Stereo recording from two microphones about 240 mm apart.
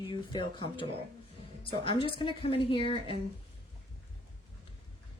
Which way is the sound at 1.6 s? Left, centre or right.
Left.